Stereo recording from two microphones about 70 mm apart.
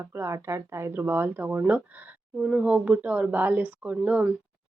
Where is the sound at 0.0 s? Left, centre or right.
Right.